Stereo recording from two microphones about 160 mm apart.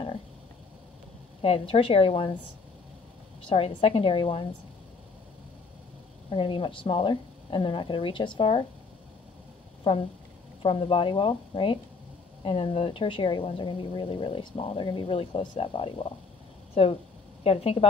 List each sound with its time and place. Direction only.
1.4 s speech: 35° left (ahead or behind)
3.4 s speech: 35° left (ahead or behind)
6.3 s speech: 35° left (ahead or behind)
10.6 s speech: 35° left (ahead or behind)